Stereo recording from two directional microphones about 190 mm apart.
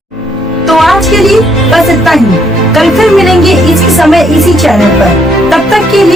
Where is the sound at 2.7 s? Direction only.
Centre (ahead or behind).